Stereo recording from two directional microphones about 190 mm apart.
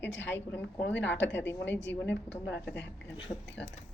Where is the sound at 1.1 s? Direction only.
10° left (ahead or behind).